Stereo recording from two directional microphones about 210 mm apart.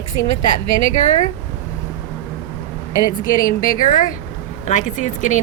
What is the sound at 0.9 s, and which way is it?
Speech, 35° left (ahead or behind).